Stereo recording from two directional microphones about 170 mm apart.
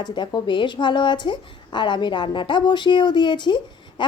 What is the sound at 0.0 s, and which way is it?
Speech, 25° left (ahead or behind).